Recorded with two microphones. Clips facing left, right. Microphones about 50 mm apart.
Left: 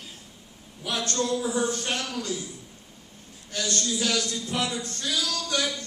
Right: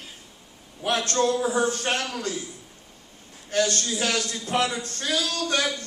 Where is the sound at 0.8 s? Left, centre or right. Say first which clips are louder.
Right 5 dB; right.